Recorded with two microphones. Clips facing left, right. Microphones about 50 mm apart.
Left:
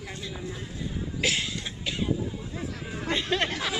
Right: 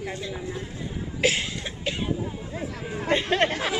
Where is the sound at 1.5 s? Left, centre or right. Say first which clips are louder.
Right 3 dB; right.